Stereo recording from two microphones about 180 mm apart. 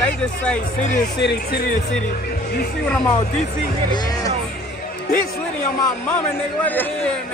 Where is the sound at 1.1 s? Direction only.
70° left (ahead or behind).